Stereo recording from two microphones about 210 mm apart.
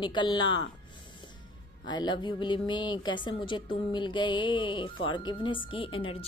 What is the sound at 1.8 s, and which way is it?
Speech, 20° left (ahead or behind).